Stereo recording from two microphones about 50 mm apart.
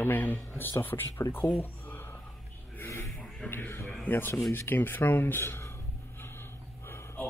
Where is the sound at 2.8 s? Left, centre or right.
Left.